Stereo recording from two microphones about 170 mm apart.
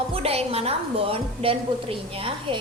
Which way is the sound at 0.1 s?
35° right (ahead or behind).